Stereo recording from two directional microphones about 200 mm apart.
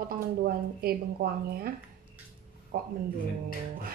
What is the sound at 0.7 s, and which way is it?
Speech, 50° right (ahead or behind).